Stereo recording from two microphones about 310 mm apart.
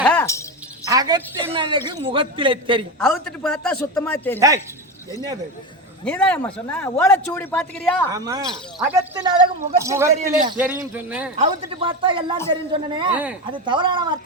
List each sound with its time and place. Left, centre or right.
0.0 s music: centre
0.9 s a woman's voice: centre
3.0 s a man's voice: centre
4.4 s speech: centre
6.1 s a man's voice: centre
8.1 s a man's voice: centre
11.3 s speech: centre
13.1 s a man's voice: centre
13.5 s speech: centre